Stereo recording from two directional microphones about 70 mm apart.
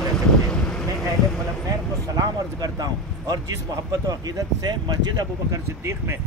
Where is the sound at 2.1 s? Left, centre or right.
Right.